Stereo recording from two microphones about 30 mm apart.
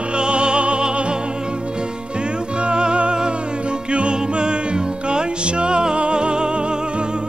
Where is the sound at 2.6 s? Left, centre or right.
Right.